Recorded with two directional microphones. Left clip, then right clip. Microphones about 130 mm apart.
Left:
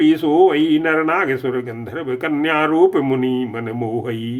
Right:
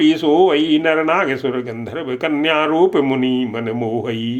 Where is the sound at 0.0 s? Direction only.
15° right (ahead or behind).